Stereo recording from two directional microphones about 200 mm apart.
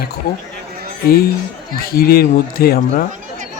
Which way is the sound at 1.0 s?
50° left (ahead or behind).